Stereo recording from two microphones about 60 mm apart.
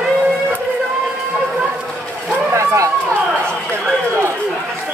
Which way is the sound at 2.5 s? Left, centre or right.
Right.